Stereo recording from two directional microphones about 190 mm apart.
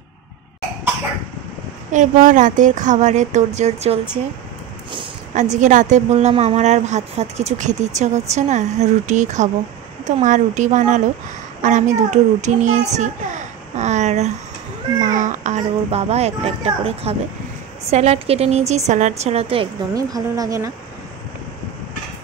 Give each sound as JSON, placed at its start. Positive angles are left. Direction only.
{"t": 1.9, "sound": "a woman's voice", "side_deg": -40}
{"t": 5.3, "sound": "a woman's voice", "side_deg": -40}
{"t": 12.9, "sound": "a sound", "side_deg": -40}
{"t": 15.1, "sound": "a woman's voice", "side_deg": -40}